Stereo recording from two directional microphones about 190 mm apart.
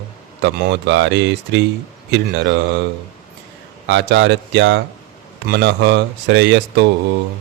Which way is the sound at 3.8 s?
70° right (ahead or behind).